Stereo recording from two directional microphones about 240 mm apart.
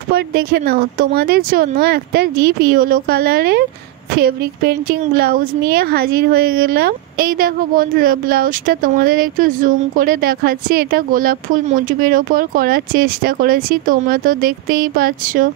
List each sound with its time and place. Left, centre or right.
0.1 s a woman's voice: right